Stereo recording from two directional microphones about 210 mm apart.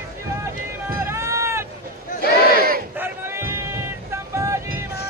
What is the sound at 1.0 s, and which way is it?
Run, 15° right (ahead or behind).